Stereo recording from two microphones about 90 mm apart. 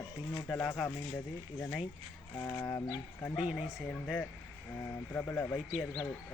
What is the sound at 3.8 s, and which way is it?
Speech, 15° left (ahead or behind).